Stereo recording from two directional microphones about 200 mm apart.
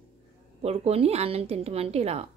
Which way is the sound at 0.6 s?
30° right (ahead or behind).